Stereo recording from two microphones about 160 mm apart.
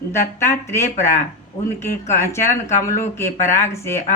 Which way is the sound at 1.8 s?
15° left (ahead or behind).